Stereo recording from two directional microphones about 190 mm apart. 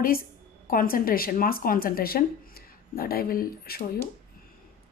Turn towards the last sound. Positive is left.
turn(degrees=50)  # may be behind; listen again after turning